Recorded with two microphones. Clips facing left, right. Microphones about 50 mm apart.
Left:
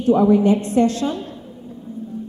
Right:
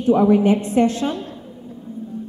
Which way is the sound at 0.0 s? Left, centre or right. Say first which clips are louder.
Even; right.